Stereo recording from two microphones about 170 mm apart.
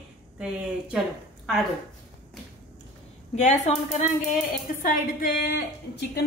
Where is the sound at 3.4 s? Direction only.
45° left (ahead or behind).